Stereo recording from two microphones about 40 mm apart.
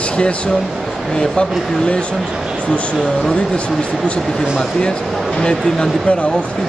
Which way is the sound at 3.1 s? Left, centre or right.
Left.